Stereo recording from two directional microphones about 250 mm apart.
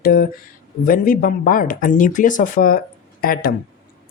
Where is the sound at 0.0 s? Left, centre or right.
Left.